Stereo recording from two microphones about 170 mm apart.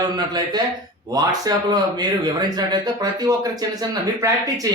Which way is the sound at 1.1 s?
25° right (ahead or behind).